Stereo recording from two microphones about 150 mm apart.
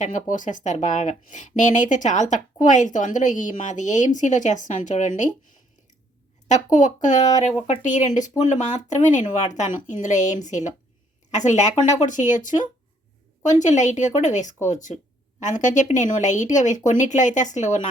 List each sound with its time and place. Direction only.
0.0 s speech: 55° left (ahead or behind)
6.5 s speech: 55° left (ahead or behind)